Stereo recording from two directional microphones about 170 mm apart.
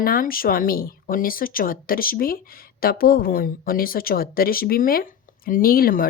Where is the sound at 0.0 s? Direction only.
55° left (ahead or behind).